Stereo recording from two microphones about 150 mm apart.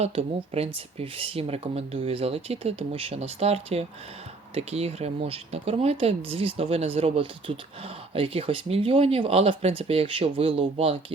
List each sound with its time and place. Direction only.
0.0 s speech: 40° right (ahead or behind)